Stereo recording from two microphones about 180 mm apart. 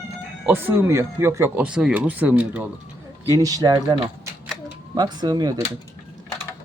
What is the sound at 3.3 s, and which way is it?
Speech, 20° right (ahead or behind).